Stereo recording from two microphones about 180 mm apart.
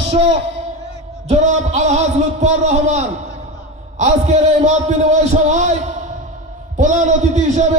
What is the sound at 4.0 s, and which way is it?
A man's voice, 40° right (ahead or behind).